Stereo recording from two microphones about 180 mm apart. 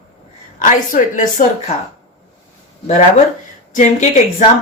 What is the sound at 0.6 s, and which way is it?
Speech, 45° left (ahead or behind).